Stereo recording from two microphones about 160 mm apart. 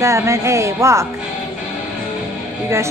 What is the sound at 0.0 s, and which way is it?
Speech, 15° right (ahead or behind).